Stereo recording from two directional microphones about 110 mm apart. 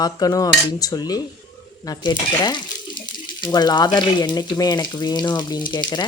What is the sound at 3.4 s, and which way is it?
Frying, 40° left (ahead or behind).